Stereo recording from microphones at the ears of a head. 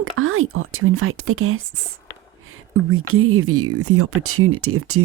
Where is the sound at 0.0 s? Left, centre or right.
Right.